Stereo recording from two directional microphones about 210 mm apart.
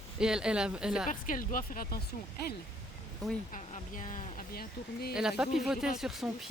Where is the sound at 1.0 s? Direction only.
40° left (ahead or behind).